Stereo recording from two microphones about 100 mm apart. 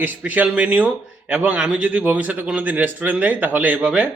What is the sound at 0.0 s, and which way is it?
Speech, 15° right (ahead or behind).